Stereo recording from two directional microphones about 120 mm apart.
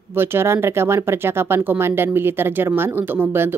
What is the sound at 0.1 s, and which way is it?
Speech, 20° right (ahead or behind).